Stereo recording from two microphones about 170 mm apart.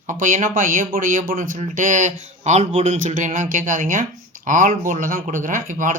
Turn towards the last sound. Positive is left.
turn(degrees=-50)  # may be behind; listen again after turning